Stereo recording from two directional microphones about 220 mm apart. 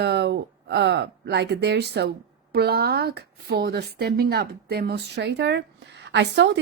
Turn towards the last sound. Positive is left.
turn(degrees=-50)  # may be behind; listen again after turning